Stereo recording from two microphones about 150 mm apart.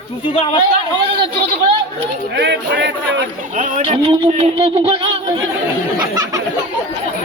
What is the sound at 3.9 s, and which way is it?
Speech, 40° right (ahead or behind).